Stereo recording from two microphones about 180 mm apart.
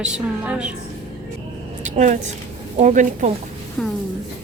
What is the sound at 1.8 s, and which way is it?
A woman's voice, 40° right (ahead or behind).